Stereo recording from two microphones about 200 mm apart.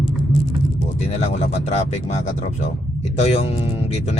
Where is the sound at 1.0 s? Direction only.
35° left (ahead or behind).